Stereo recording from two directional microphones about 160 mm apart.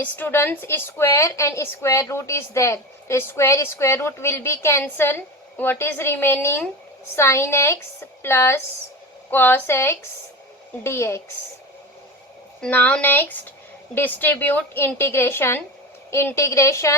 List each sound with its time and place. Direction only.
0.0 s a woman's voice: 10° left (ahead or behind)
12.6 s a woman's voice: 5° left (ahead or behind)